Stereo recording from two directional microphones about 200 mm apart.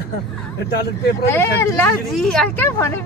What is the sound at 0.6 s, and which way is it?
Speech, 55° left (ahead or behind).